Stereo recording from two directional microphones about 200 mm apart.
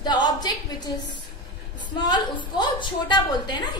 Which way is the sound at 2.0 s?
20° left (ahead or behind).